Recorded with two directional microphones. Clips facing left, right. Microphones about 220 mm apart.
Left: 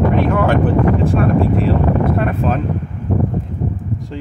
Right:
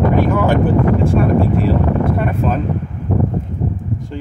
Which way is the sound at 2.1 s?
Centre (ahead or behind).